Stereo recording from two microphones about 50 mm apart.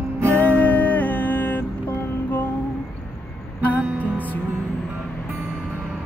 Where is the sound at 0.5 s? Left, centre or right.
Left.